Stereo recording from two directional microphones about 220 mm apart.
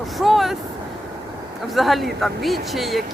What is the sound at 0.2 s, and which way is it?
Vehicle, centre (ahead or behind).